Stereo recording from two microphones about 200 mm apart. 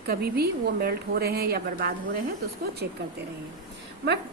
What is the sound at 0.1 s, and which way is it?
A woman's voice, 50° right (ahead or behind).